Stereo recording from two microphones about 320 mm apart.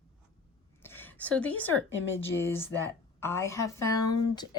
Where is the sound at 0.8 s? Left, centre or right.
Centre.